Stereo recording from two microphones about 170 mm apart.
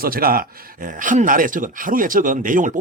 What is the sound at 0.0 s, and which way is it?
Speech, 60° right (ahead or behind).